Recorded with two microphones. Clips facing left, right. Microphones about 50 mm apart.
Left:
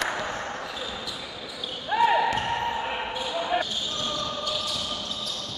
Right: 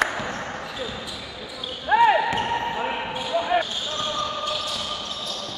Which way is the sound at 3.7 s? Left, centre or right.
Right.